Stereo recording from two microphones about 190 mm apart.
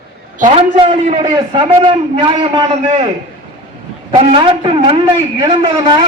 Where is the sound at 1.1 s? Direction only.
20° right (ahead or behind).